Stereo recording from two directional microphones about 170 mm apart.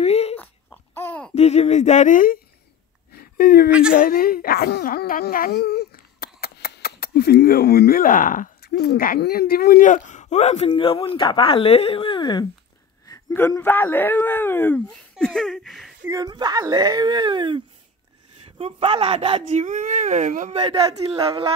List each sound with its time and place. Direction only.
0.0 s a sound: 40° left (ahead or behind)
0.4 s a sound: 10° left (ahead or behind)
1.3 s speech: 40° left (ahead or behind)
3.2 s a sound: 65° left (ahead or behind)
3.9 s speech: 60° left (ahead or behind); by 10.7 s 40° left (ahead or behind)
10.7 s speech: 25° left (ahead or behind)
13.0 s speech: 15° left (ahead or behind); by 15.9 s centre (ahead or behind)
16.1 s speech: 20° right (ahead or behind)
18.6 s speech: 30° right (ahead or behind)
19.6 s speech: 50° right (ahead or behind)
20.9 s speech: 35° right (ahead or behind)
21.2 s speech: 20° right (ahead or behind)